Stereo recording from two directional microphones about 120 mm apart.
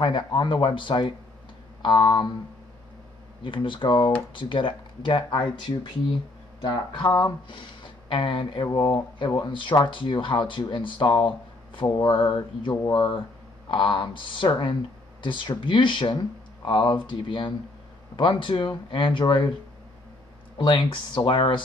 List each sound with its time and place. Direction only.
0.0 s speech: 40° left (ahead or behind)
3.4 s speech: 45° left (ahead or behind)
6.9 s speech: 40° left (ahead or behind)
20.5 s speech: 45° left (ahead or behind)